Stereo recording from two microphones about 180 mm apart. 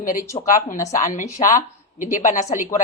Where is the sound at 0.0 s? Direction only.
50° left (ahead or behind).